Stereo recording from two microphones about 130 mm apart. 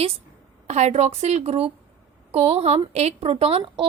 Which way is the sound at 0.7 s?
60° right (ahead or behind).